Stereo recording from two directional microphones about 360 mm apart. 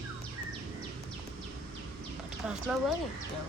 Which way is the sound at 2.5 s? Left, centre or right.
Centre.